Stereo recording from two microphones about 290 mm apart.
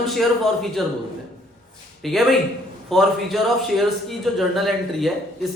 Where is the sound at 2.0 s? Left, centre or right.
Centre.